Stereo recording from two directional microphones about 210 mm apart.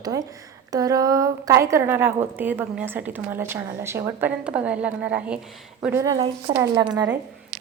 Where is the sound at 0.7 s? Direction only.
15° right (ahead or behind).